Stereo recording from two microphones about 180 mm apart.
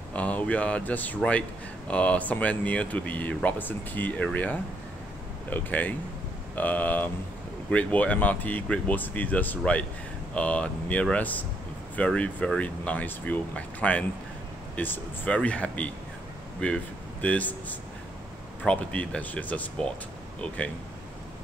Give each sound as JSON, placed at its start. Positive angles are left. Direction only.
{"t": 0.1, "sound": "speech", "side_deg": 10}